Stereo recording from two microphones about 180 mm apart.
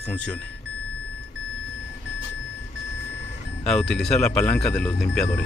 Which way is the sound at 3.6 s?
5° left (ahead or behind).